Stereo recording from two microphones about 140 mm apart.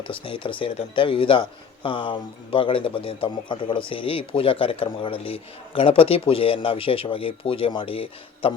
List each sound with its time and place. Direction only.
0.0 s a man's voice: 40° left (ahead or behind)